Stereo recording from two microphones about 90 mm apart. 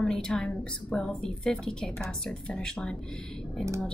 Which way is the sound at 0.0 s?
10° left (ahead or behind).